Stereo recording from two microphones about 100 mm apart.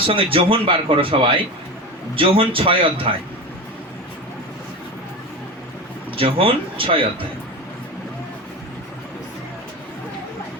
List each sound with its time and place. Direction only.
0.1 s speech: 65° right (ahead or behind)
6.1 s speech: 65° right (ahead or behind)